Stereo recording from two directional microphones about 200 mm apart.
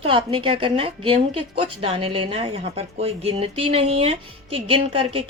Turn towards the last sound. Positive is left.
turn(degrees=-25)  # may be behind; listen again after turning